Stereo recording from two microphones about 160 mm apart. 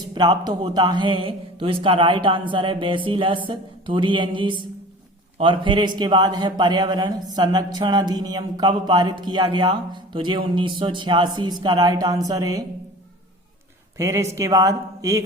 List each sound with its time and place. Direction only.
0.1 s a man's voice: 25° right (ahead or behind)
13.9 s a man's voice: 20° right (ahead or behind)